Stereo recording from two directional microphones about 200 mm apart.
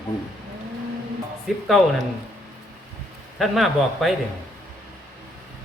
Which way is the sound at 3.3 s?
Centre (ahead or behind).